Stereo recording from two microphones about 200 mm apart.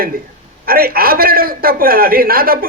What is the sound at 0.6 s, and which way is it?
A woman's voice, 50° right (ahead or behind).